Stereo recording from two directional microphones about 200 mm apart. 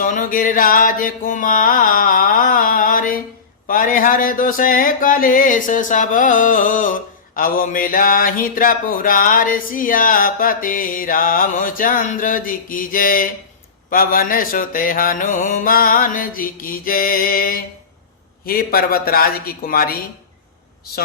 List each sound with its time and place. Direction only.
0.0 s music: 40° left (ahead or behind)